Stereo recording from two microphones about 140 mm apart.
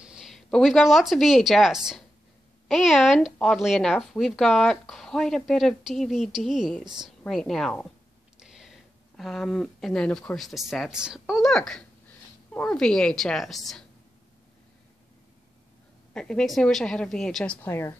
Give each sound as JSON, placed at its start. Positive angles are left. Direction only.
{"t": 0.0, "sound": "speech", "side_deg": -5}
{"t": 16.1, "sound": "speech", "side_deg": 5}
{"t": 17.6, "sound": "speech", "side_deg": 15}